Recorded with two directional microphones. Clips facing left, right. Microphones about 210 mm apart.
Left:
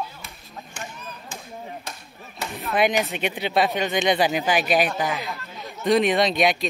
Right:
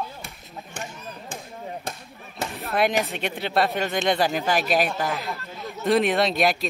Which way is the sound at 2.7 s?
Centre (ahead or behind).